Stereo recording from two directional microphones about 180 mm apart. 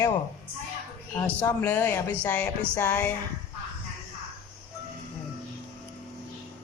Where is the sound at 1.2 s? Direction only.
10° left (ahead or behind).